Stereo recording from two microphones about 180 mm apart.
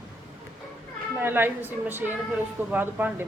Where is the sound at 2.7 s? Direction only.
10° right (ahead or behind).